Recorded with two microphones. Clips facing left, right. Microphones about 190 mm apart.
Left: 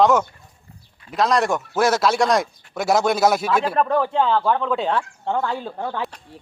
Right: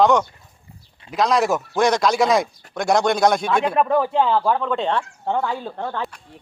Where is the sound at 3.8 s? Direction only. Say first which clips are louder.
Right 2 dB; 5° right (ahead or behind).